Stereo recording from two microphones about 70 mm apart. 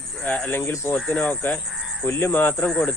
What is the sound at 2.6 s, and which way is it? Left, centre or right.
Speech, centre.